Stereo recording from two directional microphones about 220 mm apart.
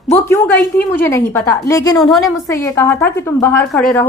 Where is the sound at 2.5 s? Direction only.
15° left (ahead or behind).